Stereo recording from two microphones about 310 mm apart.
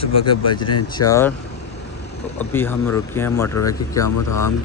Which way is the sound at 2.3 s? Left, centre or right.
Centre.